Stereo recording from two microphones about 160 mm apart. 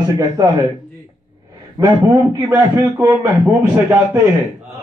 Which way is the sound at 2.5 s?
15° right (ahead or behind).